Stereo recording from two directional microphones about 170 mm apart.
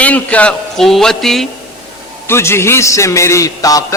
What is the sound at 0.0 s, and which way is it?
A man's voice, 10° left (ahead or behind).